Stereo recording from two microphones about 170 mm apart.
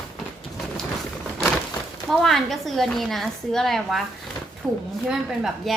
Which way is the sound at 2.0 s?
Centre (ahead or behind).